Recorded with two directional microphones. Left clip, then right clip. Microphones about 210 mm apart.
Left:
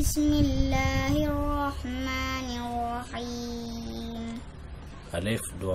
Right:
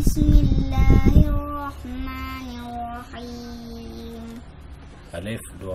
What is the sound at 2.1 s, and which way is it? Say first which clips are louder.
Music: left 3 dB; 45° left (ahead or behind).